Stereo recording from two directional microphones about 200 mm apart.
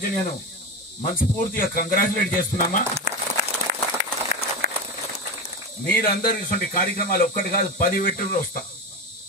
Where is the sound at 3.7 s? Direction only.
50° right (ahead or behind).